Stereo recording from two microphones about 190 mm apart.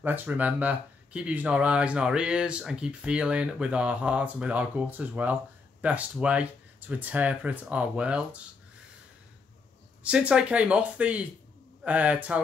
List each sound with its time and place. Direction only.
0.0 s speech: 10° right (ahead or behind)
10.0 s speech: 5° right (ahead or behind)